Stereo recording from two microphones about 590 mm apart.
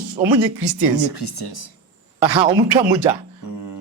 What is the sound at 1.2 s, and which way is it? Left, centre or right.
Speech, left.